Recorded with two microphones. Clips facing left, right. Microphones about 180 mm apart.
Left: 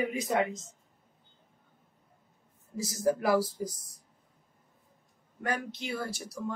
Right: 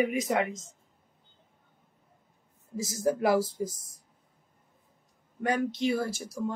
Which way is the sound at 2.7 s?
25° right (ahead or behind).